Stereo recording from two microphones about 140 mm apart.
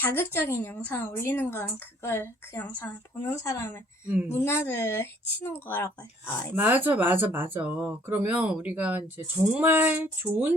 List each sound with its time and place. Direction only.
0.0 s speech: 15° left (ahead or behind)
6.5 s speech: 15° right (ahead or behind)